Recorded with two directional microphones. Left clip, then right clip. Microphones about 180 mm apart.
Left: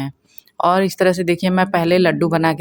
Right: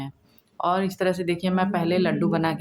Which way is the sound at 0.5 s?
40° left (ahead or behind).